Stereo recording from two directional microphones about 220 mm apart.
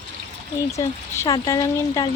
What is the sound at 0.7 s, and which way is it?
Speech, 15° left (ahead or behind).